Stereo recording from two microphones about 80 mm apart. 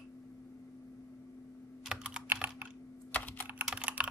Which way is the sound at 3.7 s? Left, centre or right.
Centre.